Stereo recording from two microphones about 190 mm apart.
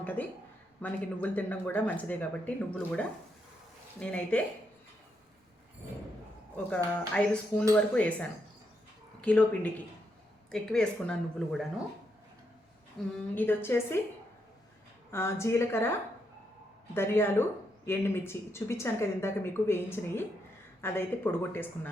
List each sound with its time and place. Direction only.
0.0 s a man's voice: 10° left (ahead or behind)
6.7 s a woman's voice: 5° left (ahead or behind)
13.0 s a woman's voice: centre (ahead or behind)
13.3 s speech: 10° left (ahead or behind)
15.1 s speech: 15° left (ahead or behind)